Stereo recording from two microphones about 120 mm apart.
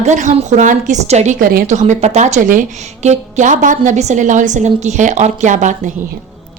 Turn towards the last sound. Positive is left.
turn(degrees=-90)